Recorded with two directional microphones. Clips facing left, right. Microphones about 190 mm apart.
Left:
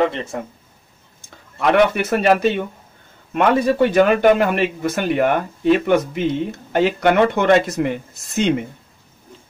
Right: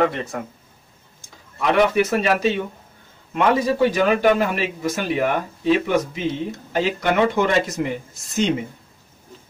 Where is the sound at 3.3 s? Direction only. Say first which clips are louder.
Left 3 dB; 60° left (ahead or behind).